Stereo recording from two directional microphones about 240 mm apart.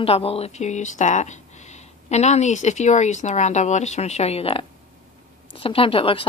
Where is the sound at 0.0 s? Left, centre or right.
Left.